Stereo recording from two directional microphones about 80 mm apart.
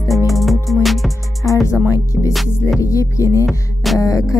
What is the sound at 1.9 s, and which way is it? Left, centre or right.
Music, left.